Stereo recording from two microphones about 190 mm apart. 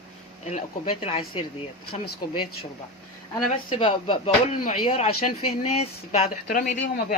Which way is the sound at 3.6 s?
30° left (ahead or behind).